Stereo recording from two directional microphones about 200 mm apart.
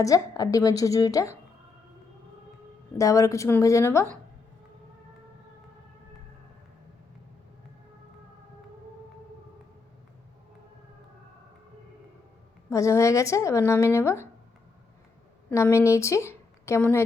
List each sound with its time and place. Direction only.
0.0 s speech: 15° left (ahead or behind)
3.0 s speech: 15° left (ahead or behind)
12.7 s speech: 15° left (ahead or behind)
15.4 s speech: 15° left (ahead or behind)